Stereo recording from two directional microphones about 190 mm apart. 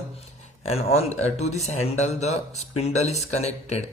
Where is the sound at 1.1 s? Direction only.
35° left (ahead or behind).